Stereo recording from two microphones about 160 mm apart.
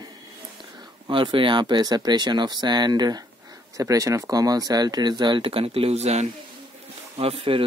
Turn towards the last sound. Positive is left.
turn(degrees=-35)  # may be behind; listen again after turning